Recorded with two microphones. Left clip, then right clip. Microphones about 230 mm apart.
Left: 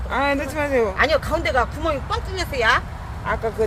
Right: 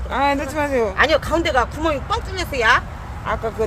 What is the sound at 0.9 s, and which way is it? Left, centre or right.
Speech, right.